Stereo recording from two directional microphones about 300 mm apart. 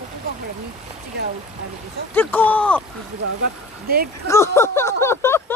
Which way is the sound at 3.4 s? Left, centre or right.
Right.